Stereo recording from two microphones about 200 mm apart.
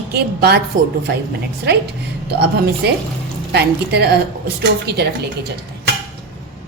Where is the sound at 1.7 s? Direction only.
55° right (ahead or behind).